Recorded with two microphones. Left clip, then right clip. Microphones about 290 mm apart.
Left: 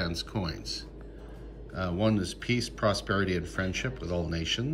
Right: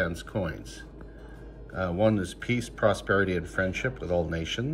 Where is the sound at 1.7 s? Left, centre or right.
Centre.